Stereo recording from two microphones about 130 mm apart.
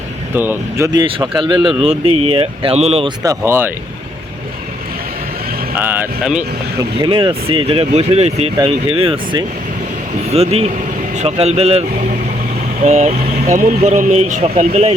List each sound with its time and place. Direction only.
0.3 s speech: 15° right (ahead or behind)
0.9 s speech: 35° right (ahead or behind); by 3.1 s 50° right (ahead or behind)
3.2 s speech: 20° right (ahead or behind)
5.7 s speech: 15° right (ahead or behind)
7.0 s speech: 35° right (ahead or behind); by 11.8 s 55° right (ahead or behind)
12.8 s speech: 60° right (ahead or behind)